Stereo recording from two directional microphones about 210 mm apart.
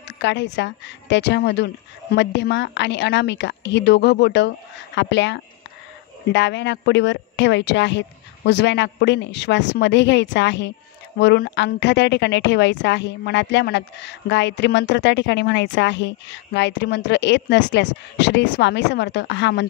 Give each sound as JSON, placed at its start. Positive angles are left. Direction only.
{"t": 0.2, "sound": "a woman's voice", "side_deg": 55}